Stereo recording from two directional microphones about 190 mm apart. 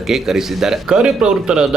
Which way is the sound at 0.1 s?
Centre (ahead or behind).